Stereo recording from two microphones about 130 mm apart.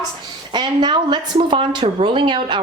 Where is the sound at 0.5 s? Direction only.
35° right (ahead or behind).